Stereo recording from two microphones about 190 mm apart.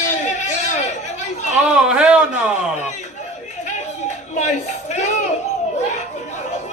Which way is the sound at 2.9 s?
40° left (ahead or behind).